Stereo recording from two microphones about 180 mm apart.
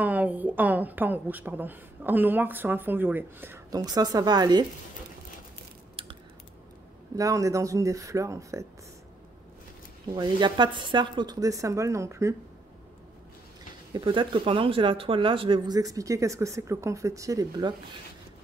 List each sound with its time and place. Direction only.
0.0 s a woman's voice: 10° right (ahead or behind)
7.2 s a woman's voice: 20° right (ahead or behind)
10.1 s speech: 25° right (ahead or behind)
13.9 s speech: 25° right (ahead or behind)